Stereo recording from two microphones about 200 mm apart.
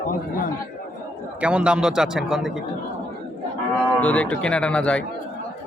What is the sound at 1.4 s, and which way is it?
A man's voice, 5° right (ahead or behind).